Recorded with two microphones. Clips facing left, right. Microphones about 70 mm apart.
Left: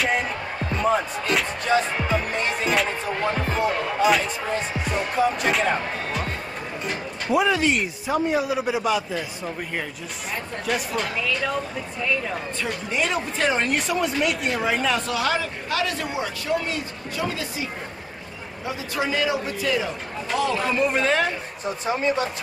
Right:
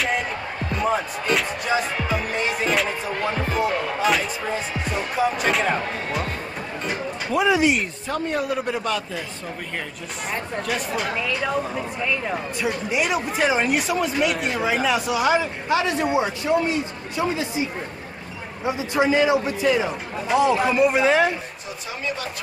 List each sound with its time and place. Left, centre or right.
0.8 s a man's voice: centre
7.4 s speech: centre
7.8 s a man's voice: centre
10.7 s speech: centre
12.3 s a man's voice: centre
21.8 s speech: left